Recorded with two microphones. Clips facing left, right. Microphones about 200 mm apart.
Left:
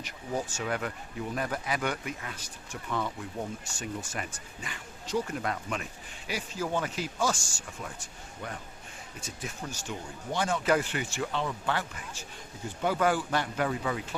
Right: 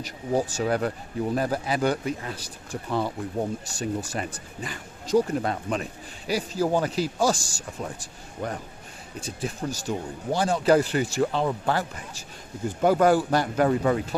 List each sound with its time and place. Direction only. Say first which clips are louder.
0.0 s speech: right 8 dB; 35° right (ahead or behind)
3.7 s speech: right 8 dB; 35° right (ahead or behind)